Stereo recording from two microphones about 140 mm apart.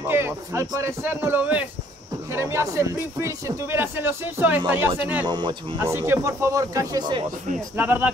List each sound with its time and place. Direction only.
0.0 s speech: 20° right (ahead or behind)
5.3 s speech: 35° right (ahead or behind)
5.8 s speech: 15° right (ahead or behind); by 7.2 s 30° right (ahead or behind)
7.7 s speech: 10° right (ahead or behind)